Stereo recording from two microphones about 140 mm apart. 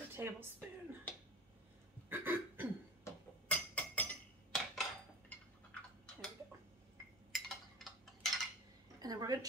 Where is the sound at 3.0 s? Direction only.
10° left (ahead or behind).